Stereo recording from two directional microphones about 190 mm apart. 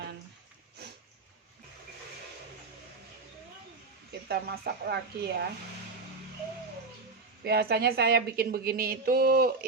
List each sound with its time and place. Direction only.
4.3 s speech: 55° right (ahead or behind)
7.4 s a woman's voice: 55° right (ahead or behind)